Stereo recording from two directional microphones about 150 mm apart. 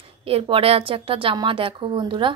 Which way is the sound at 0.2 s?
40° right (ahead or behind).